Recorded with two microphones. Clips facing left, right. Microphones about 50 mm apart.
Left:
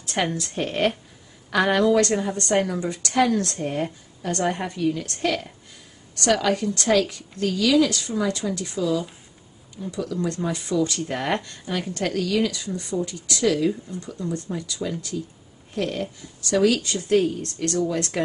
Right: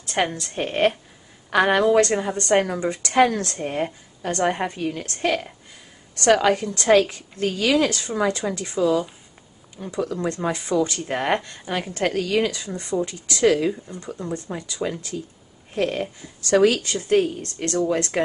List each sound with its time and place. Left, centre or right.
0.3 s speech: centre
0.6 s a woman's voice: centre; by 3.4 s right
3.5 s a woman's voice: right
4.7 s a woman's voice: right
5.2 s a woman's voice: right
6.2 s a woman's voice: right